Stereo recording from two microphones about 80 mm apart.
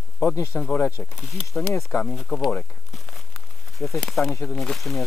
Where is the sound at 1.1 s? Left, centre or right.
Centre.